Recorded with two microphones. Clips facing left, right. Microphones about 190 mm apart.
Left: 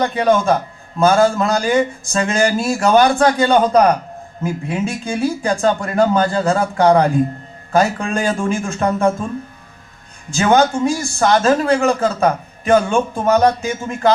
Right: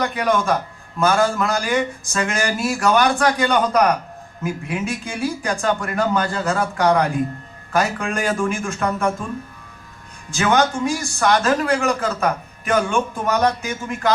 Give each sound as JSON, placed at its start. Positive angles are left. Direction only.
{"t": 0.0, "sound": "a man's voice", "side_deg": 25}
{"t": 10.3, "sound": "a man's voice", "side_deg": 25}